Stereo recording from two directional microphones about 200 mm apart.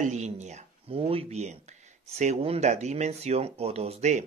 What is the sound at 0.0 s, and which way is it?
Speech, 35° right (ahead or behind).